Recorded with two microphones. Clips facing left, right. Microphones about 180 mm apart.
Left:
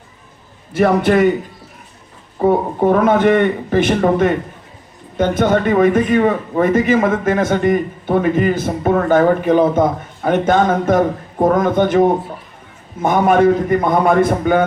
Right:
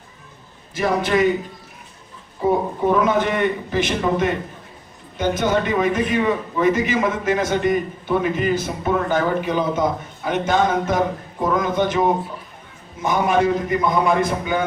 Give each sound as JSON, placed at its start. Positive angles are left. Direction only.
{"t": 0.7, "sound": "a man's voice", "side_deg": 60}
{"t": 2.4, "sound": "a man's voice", "side_deg": 60}